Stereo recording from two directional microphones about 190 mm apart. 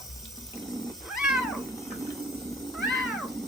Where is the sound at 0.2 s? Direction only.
Centre (ahead or behind).